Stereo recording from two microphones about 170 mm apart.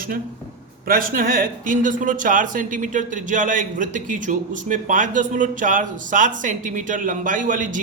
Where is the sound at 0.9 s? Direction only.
55° right (ahead or behind).